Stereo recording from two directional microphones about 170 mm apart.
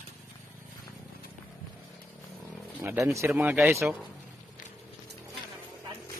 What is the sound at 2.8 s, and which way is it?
Speech, 15° right (ahead or behind).